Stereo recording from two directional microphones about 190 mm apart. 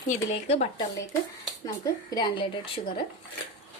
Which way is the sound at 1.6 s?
20° left (ahead or behind).